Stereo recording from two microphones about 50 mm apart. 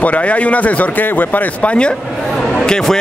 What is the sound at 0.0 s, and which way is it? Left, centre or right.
A man's voice, left.